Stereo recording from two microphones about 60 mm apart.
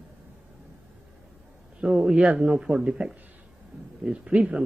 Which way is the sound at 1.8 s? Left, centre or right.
Centre.